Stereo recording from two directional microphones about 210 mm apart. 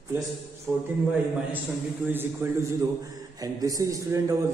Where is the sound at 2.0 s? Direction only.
10° right (ahead or behind).